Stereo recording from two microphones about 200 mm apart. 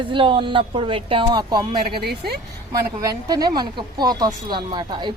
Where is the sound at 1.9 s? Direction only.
50° right (ahead or behind).